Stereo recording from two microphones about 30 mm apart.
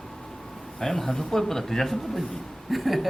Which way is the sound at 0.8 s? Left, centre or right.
Centre.